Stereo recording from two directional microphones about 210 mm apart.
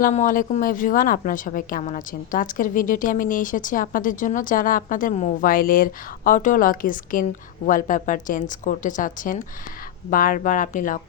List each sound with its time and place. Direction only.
0.0 s a woman's voice: 35° left (ahead or behind)